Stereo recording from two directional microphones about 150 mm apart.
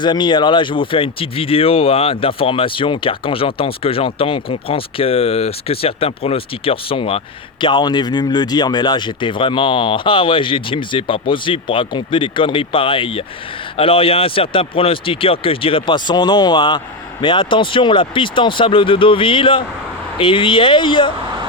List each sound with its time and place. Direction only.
0.0 s speech: 30° left (ahead or behind)